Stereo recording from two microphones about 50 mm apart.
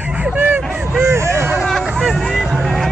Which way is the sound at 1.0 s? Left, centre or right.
Right.